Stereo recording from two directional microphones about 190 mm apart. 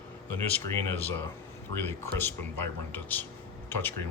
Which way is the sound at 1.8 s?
10° left (ahead or behind).